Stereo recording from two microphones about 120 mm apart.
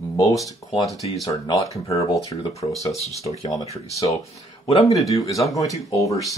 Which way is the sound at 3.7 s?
60° left (ahead or behind).